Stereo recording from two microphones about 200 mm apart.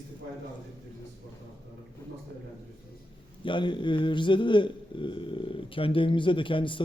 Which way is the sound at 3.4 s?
25° left (ahead or behind).